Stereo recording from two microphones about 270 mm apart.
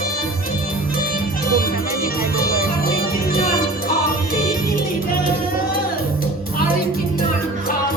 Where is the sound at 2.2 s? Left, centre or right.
Left.